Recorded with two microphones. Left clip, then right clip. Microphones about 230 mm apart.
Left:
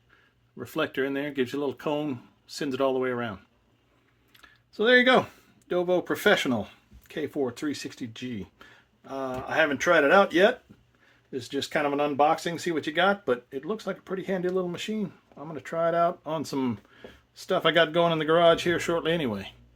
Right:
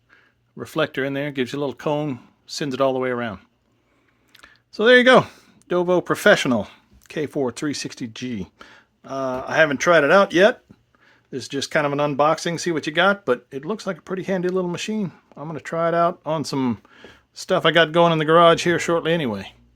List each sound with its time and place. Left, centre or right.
0.5 s speech: right